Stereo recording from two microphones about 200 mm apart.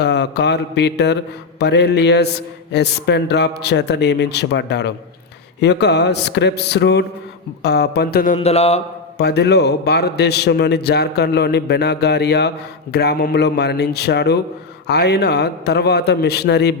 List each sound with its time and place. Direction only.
0.0 s a man's voice: 60° left (ahead or behind); by 8.8 s 30° left (ahead or behind)
9.1 s a man's voice: 55° left (ahead or behind)